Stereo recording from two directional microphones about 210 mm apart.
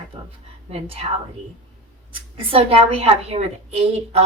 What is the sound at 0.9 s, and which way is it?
Speech, 30° right (ahead or behind).